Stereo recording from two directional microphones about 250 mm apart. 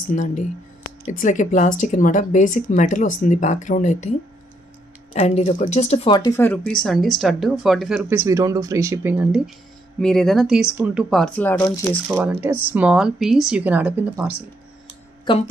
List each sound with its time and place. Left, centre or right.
0.1 s speech: left
5.1 s speech: left
12.1 s speech: centre